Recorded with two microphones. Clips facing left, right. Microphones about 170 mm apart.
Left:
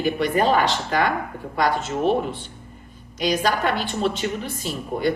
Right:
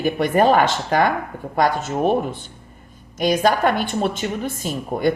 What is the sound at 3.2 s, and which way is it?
Speech, 50° right (ahead or behind).